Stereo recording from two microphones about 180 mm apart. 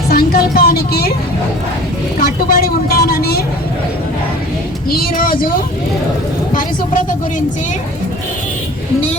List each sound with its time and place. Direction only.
0.1 s speech: 55° left (ahead or behind)
2.2 s speech: 55° left (ahead or behind)
4.9 s speech: 55° left (ahead or behind)